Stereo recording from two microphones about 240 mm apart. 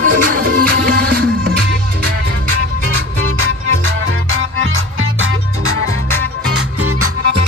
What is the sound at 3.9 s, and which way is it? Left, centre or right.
Music, right.